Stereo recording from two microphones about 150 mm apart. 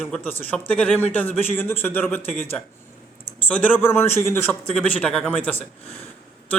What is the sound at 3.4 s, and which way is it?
A man's voice, 10° left (ahead or behind).